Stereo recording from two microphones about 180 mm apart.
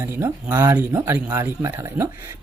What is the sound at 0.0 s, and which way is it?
Speech, 15° right (ahead or behind).